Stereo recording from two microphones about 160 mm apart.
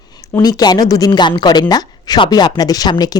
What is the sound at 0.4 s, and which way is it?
Speech, 25° left (ahead or behind).